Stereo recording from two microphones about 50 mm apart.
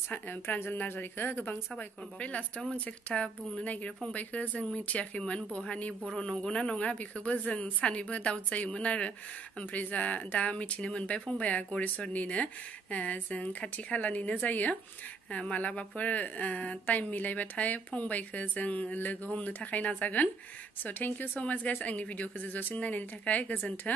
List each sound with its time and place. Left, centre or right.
0.1 s a woman's voice: left
2.1 s a woman's voice: left